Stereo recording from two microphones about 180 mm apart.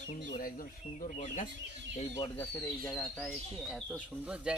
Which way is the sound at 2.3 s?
10° left (ahead or behind).